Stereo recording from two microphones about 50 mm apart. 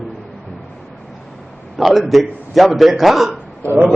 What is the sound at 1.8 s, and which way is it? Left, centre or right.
A man's voice, centre.